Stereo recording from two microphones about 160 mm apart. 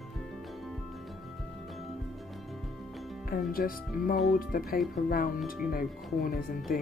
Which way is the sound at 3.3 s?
65° left (ahead or behind).